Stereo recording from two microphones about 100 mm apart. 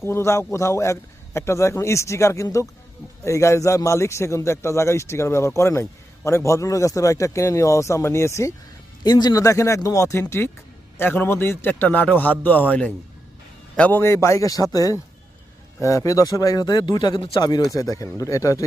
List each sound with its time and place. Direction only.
0.0 s a man's voice: 25° left (ahead or behind)
9.0 s a man's voice: 45° left (ahead or behind); by 14.0 s 15° left (ahead or behind)
14.0 s speech: 30° left (ahead or behind)